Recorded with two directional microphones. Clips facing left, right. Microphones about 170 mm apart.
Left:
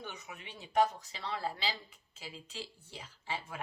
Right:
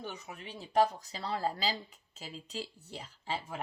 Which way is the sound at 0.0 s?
35° right (ahead or behind).